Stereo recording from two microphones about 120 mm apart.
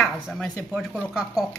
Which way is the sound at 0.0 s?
5° left (ahead or behind).